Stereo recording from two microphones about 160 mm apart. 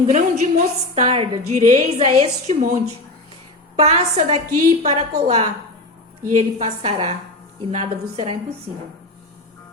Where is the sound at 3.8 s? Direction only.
45° right (ahead or behind).